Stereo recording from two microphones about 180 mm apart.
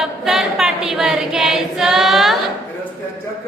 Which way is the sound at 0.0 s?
Centre (ahead or behind).